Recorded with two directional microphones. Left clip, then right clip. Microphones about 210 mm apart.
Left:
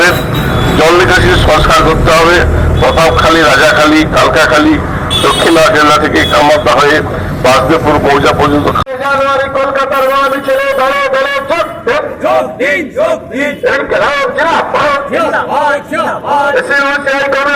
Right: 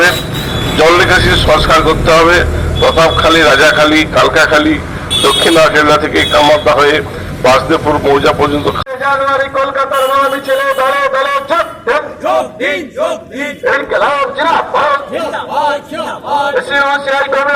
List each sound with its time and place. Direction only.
0.8 s a man's voice: 35° right (ahead or behind)
9.3 s a man's voice: centre (ahead or behind)
13.7 s a man's voice: centre (ahead or behind)